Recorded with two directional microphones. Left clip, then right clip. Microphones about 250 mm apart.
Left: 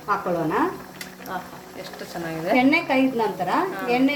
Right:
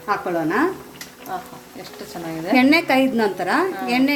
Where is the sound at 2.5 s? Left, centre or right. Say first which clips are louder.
Right 4 dB; right.